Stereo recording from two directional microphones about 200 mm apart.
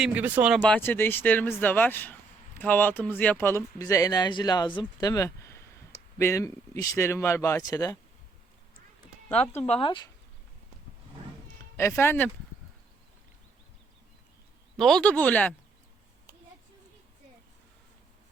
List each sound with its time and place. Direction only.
0.0 s speech: 5° right (ahead or behind); by 7.9 s 15° left (ahead or behind)
9.6 s speech: 30° left (ahead or behind)
11.8 s speech: 15° left (ahead or behind)
14.8 s speech: centre (ahead or behind)